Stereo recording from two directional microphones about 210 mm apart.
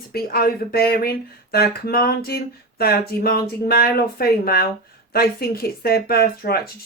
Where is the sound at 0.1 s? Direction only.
45° left (ahead or behind).